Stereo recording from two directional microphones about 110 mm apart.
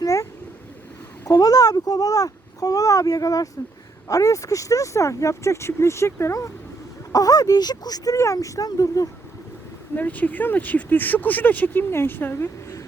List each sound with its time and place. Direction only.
0.0 s a sound: 30° left (ahead or behind)
1.2 s speech: 35° left (ahead or behind)
9.9 s speech: 15° left (ahead or behind)